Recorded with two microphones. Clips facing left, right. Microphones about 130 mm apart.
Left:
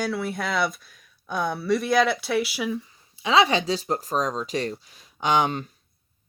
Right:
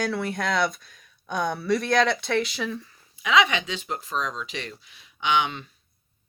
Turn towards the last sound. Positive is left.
turn(degrees=40)  # may be behind; listen again after turning